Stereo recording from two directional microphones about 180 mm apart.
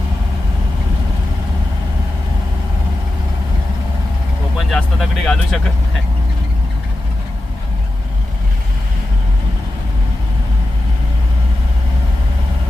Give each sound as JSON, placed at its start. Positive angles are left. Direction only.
{"t": 4.7, "sound": "vehicle", "side_deg": 0}